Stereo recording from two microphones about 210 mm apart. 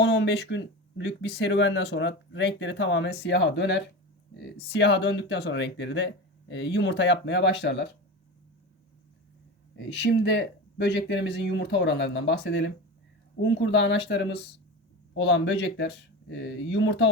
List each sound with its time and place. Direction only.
0.0 s speech: 55° left (ahead or behind)
9.7 s speech: 55° left (ahead or behind)